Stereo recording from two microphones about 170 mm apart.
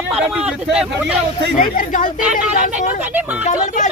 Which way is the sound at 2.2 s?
5° right (ahead or behind).